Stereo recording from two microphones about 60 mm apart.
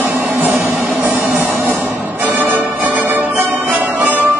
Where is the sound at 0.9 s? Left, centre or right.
Right.